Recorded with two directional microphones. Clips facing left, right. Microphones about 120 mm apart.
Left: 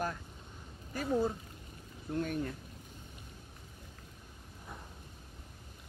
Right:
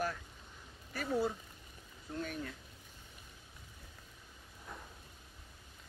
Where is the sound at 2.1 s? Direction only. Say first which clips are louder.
Left 6 dB; 40° left (ahead or behind).